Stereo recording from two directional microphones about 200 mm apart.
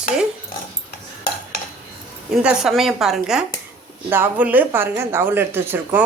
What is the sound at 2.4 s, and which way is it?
Speech, 5° right (ahead or behind).